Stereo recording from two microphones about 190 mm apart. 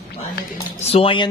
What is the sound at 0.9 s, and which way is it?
Speech, 30° left (ahead or behind).